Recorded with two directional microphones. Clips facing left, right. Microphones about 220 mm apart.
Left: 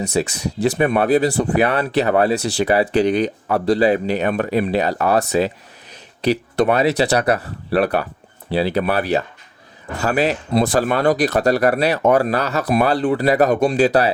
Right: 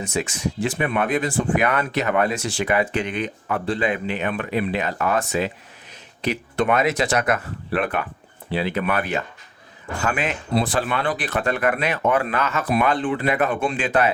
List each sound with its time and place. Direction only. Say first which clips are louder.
0.0 s speech: left 4 dB; 35° left (ahead or behind)